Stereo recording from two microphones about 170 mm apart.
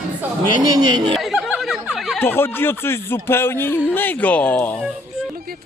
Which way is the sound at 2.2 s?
15° left (ahead or behind).